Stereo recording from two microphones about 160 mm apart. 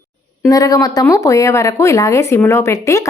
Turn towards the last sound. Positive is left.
turn(degrees=20)  # may be behind; listen again after turning